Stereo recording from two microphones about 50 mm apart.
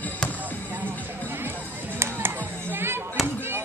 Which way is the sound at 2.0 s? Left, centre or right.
Right.